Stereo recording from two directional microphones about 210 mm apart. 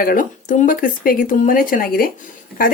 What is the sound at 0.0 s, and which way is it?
Speech, 40° left (ahead or behind).